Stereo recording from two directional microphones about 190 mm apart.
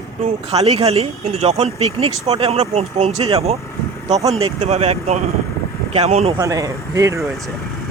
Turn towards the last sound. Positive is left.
turn(degrees=-15)  # may be behind; listen again after turning